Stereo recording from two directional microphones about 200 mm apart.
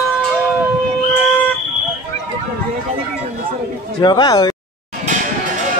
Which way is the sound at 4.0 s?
20° left (ahead or behind).